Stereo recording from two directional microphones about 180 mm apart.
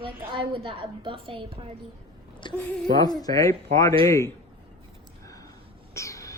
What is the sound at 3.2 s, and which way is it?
Speech, 20° left (ahead or behind).